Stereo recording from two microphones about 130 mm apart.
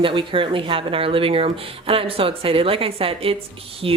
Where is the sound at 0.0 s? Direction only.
40° right (ahead or behind).